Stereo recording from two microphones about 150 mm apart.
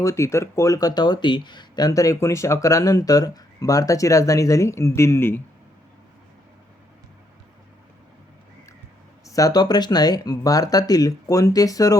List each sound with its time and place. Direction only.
0.0 s speech: 20° left (ahead or behind)
9.2 s speech: 25° left (ahead or behind)